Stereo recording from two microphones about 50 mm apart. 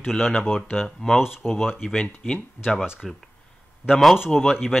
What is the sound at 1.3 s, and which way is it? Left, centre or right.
Speech, centre.